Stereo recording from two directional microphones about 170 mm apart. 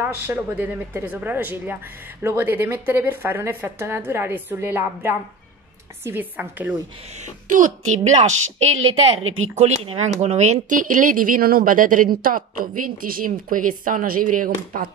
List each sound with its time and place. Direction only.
0.0 s a woman's voice: 10° right (ahead or behind)
7.4 s speech: 50° right (ahead or behind)
9.6 s speech: 40° right (ahead or behind); by 14.9 s 55° right (ahead or behind)